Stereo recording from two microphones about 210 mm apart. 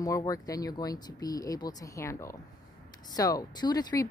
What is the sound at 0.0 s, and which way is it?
Speech, 15° left (ahead or behind).